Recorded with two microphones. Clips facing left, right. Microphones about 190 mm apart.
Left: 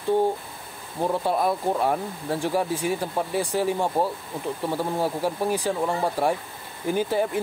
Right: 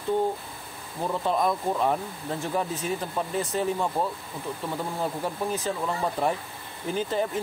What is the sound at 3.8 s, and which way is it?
Speech, 30° left (ahead or behind).